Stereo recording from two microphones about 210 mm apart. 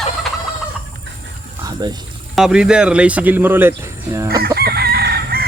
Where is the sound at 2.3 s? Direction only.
5° right (ahead or behind).